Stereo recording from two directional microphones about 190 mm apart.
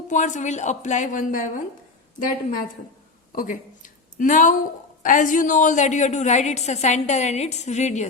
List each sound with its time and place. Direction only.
0.1 s a woman's voice: 40° left (ahead or behind)